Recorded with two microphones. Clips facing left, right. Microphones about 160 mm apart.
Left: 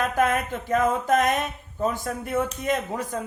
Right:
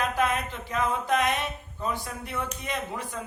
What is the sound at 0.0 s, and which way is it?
Speech, 45° left (ahead or behind).